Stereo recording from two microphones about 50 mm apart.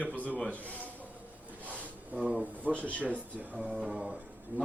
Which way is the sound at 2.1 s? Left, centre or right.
Right.